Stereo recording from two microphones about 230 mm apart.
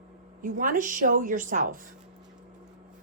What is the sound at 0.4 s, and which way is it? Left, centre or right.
A woman's voice, right.